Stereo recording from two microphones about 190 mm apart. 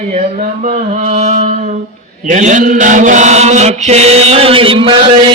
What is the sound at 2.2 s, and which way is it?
Chant, 40° right (ahead or behind).